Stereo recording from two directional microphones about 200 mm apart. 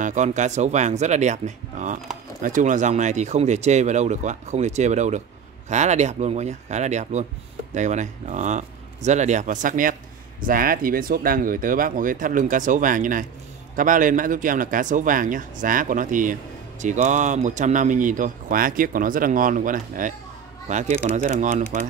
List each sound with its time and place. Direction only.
0.0 s speech: 35° right (ahead or behind)